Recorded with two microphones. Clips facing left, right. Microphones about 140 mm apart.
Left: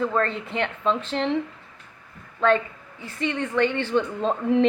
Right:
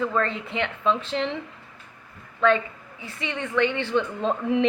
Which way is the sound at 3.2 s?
40° left (ahead or behind).